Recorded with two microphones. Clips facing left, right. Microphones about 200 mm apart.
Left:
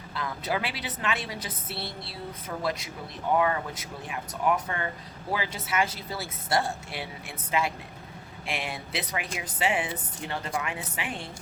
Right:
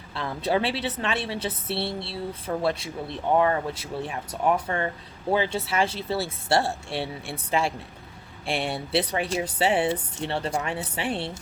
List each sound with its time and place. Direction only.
0.1 s speech: 30° right (ahead or behind)